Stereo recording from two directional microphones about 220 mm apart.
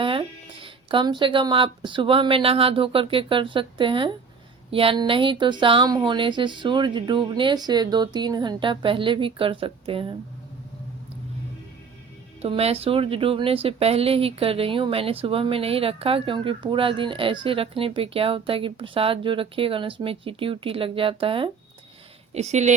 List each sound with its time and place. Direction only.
0.0 s speech: 25° right (ahead or behind)
12.4 s a woman's voice: 25° right (ahead or behind)